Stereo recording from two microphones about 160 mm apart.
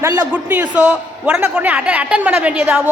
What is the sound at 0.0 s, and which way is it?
A woman's voice, 15° right (ahead or behind).